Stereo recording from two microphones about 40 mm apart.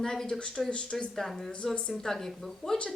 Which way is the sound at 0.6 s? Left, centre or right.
Left.